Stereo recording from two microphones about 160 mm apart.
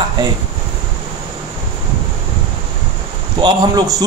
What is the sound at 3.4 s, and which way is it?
Speech, 25° right (ahead or behind).